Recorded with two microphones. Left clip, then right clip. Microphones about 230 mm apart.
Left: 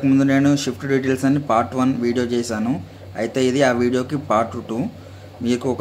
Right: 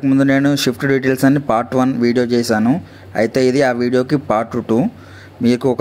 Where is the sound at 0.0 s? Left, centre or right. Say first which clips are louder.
Right 3 dB; right.